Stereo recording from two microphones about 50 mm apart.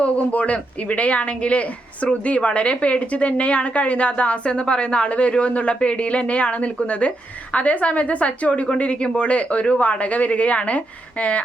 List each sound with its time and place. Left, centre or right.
0.0 s a woman's voice: left